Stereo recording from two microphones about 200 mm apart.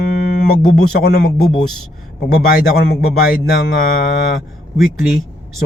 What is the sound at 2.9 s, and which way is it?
Speech, 50° left (ahead or behind).